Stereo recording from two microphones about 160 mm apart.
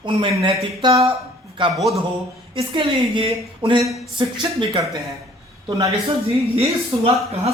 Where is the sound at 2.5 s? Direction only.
35° right (ahead or behind).